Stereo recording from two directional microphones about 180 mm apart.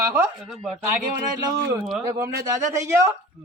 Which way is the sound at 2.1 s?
15° right (ahead or behind).